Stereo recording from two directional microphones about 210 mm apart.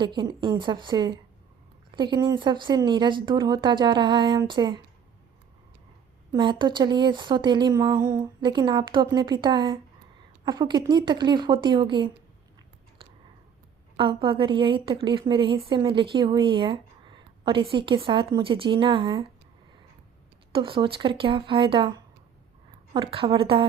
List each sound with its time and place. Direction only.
0.0 s a woman's voice: 20° right (ahead or behind)
6.3 s a woman's voice: 20° right (ahead or behind)
13.9 s a woman's voice: 25° right (ahead or behind)
20.5 s a woman's voice: 25° right (ahead or behind)